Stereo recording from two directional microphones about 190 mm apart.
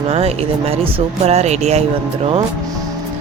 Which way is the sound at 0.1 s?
30° right (ahead or behind).